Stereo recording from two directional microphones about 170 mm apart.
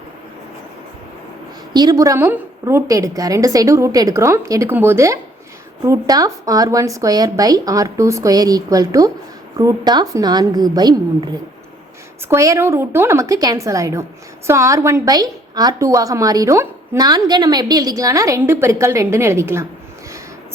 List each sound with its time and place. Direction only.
1.7 s a woman's voice: 25° right (ahead or behind)